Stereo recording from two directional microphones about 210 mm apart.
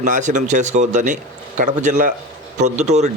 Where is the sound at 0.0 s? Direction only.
35° right (ahead or behind).